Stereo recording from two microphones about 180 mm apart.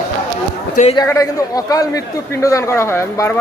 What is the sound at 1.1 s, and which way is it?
A man's voice, 20° left (ahead or behind).